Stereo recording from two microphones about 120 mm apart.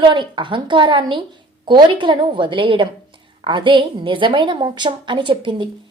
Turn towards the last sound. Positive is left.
turn(degrees=-45)  # may be behind; listen again after turning